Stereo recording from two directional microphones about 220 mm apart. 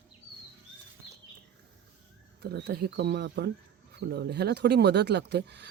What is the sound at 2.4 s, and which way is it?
Speech, 45° right (ahead or behind).